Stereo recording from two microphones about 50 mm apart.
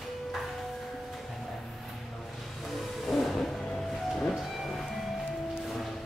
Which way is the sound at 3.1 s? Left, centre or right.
Centre.